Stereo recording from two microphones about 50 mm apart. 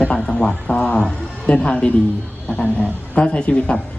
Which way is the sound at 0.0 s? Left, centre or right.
Centre.